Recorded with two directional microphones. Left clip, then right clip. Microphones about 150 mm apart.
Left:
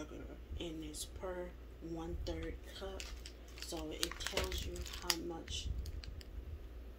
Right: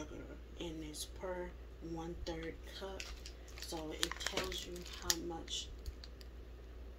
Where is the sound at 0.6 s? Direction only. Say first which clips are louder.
Even; centre (ahead or behind).